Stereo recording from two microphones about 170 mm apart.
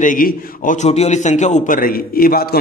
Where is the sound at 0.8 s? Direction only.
40° left (ahead or behind); by 2.6 s 60° left (ahead or behind).